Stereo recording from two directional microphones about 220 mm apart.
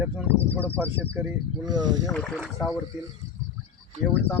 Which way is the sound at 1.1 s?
15° right (ahead or behind).